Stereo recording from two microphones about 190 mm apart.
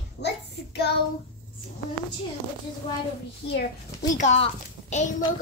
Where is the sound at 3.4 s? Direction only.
65° left (ahead or behind).